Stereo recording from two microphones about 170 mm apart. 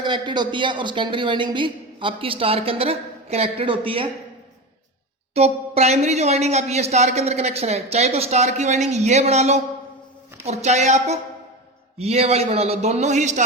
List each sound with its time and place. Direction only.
0.0 s speech: 25° right (ahead or behind)
5.3 s speech: 35° right (ahead or behind)